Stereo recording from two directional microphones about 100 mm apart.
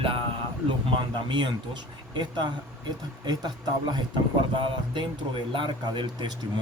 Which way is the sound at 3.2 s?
45° right (ahead or behind).